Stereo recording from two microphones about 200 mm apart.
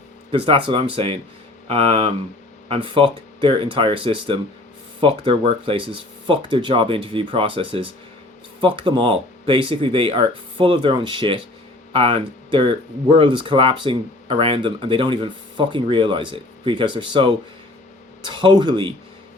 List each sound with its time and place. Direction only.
0.3 s speech: 25° right (ahead or behind)
18.3 s speech: 25° right (ahead or behind)